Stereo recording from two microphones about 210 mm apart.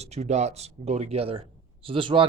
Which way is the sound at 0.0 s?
30° right (ahead or behind).